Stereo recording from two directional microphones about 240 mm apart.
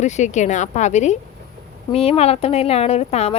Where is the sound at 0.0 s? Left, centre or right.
Left.